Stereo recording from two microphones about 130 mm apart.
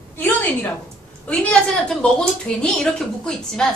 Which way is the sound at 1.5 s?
5° left (ahead or behind).